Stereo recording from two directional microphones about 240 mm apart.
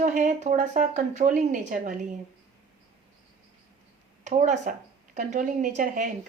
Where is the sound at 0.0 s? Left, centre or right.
Right.